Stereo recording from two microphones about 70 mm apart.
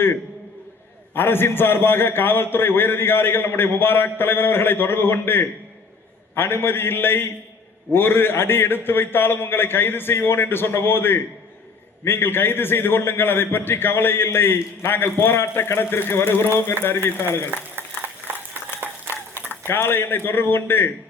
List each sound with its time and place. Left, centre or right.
1.1 s a man's voice: left
18.0 s a sound: left
19.4 s speech: left